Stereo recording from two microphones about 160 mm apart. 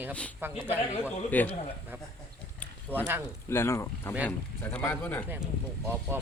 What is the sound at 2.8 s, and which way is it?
Speech, 10° right (ahead or behind).